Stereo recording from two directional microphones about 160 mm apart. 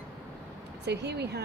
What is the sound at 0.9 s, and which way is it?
Speech, 90° right.